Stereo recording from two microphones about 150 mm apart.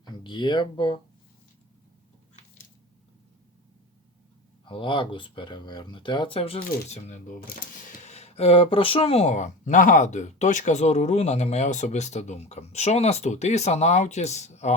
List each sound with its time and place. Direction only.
0.0 s speech: 30° left (ahead or behind)
4.6 s speech: 35° left (ahead or behind)
7.4 s speech: 65° left (ahead or behind); by 14.7 s 50° left (ahead or behind)